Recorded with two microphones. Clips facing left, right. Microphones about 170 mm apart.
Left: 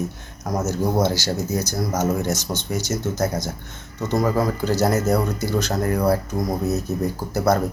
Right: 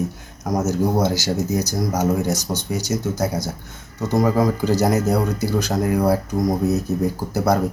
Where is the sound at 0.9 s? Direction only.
10° right (ahead or behind).